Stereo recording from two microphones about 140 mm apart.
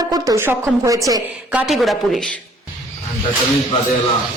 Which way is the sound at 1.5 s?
5° right (ahead or behind).